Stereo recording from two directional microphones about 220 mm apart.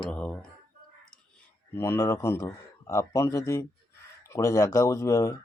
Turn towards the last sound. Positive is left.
turn(degrees=15)  # may be behind; listen again after turning